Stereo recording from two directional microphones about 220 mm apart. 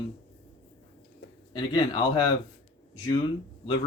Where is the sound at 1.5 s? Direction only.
20° left (ahead or behind).